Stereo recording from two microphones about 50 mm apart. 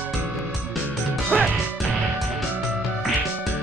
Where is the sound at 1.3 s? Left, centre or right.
Centre.